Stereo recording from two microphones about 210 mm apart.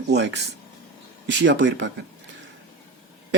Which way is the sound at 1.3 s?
60° right (ahead or behind).